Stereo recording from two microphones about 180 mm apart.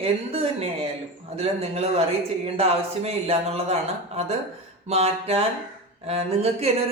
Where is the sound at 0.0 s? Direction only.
35° right (ahead or behind).